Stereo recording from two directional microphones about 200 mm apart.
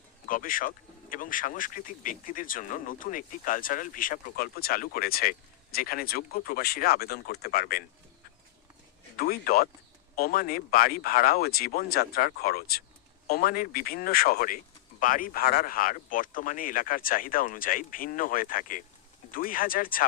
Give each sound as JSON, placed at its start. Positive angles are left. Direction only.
{"t": 0.3, "sound": "speech", "side_deg": 40}
{"t": 9.1, "sound": "speech", "side_deg": 50}